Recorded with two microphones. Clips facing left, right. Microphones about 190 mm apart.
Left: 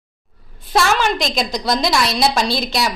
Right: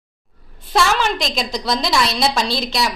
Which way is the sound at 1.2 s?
Centre (ahead or behind).